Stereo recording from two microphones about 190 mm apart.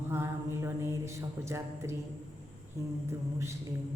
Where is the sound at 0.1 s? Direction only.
15° right (ahead or behind).